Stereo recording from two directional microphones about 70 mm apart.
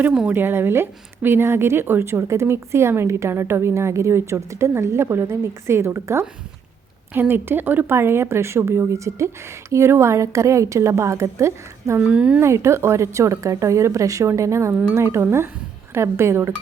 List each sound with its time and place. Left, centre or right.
0.3 s a woman's voice: right
7.1 s a woman's voice: right
11.9 s speech: centre
12.4 s a woman's voice: right